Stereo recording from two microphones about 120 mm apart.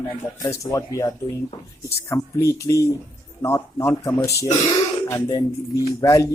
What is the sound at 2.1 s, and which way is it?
Speech, 25° left (ahead or behind).